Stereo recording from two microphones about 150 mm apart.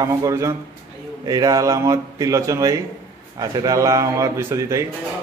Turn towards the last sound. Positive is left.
turn(degrees=-20)  # may be behind; listen again after turning